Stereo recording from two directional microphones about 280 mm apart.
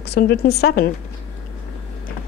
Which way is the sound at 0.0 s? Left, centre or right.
Left.